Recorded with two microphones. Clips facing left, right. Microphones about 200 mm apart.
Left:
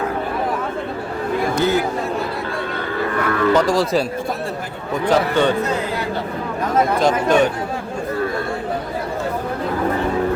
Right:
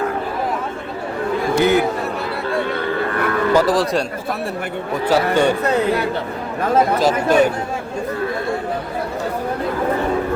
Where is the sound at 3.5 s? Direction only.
5° right (ahead or behind).